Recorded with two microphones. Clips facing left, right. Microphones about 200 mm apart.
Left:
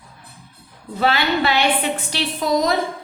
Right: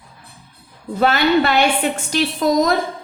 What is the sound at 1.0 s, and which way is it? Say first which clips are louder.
A woman's voice: right 4 dB; 50° right (ahead or behind).